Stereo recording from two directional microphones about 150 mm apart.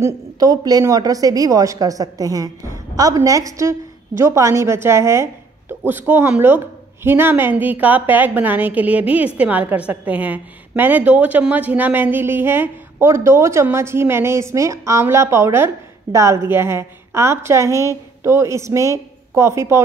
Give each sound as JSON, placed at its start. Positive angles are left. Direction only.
{"t": 0.0, "sound": "a woman's voice", "side_deg": -25}